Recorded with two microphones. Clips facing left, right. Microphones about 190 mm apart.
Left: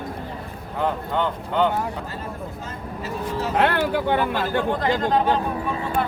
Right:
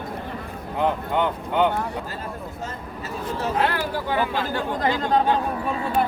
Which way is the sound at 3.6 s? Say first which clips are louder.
Left 6 dB; 60° left (ahead or behind).